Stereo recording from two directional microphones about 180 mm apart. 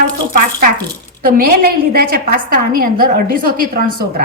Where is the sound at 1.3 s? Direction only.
60° right (ahead or behind).